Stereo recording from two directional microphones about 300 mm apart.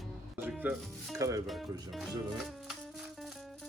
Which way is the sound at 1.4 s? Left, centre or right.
Centre.